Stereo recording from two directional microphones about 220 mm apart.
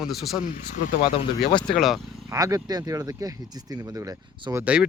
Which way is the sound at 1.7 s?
Centre (ahead or behind).